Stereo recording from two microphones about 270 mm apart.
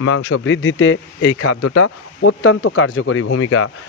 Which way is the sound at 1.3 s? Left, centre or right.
Left.